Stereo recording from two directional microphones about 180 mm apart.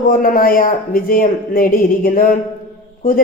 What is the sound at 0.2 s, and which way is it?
A woman's voice, 50° left (ahead or behind).